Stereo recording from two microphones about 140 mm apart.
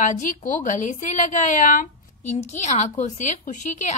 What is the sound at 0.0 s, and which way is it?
A woman's voice, 65° left (ahead or behind).